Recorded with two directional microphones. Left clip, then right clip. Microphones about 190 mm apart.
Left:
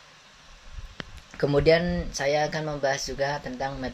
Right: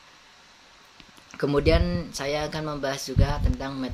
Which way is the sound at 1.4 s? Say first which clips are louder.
Left 2 dB; 10° right (ahead or behind).